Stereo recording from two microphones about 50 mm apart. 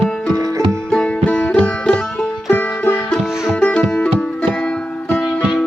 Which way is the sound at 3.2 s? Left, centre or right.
Centre.